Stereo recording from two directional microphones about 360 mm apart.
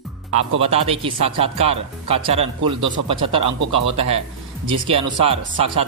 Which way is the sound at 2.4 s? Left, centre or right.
Right.